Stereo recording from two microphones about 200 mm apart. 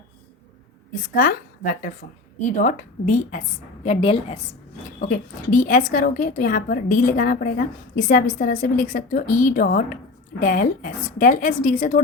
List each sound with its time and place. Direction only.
1.0 s a woman's voice: 45° left (ahead or behind)
3.8 s a woman's voice: 30° left (ahead or behind)
5.0 s a woman's voice: 40° left (ahead or behind)